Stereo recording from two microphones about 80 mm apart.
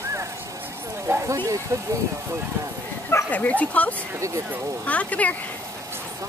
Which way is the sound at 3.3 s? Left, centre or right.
Centre.